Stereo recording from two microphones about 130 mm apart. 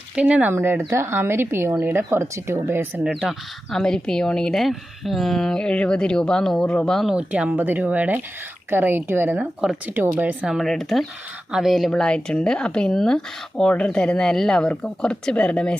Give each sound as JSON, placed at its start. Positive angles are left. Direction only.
{"t": 0.2, "sound": "speech", "side_deg": -10}
{"t": 3.0, "sound": "speech", "side_deg": -5}